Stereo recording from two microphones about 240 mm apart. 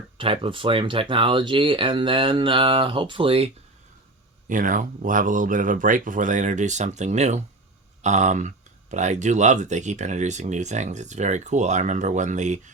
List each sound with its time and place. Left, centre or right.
0.2 s speech: right
4.4 s speech: right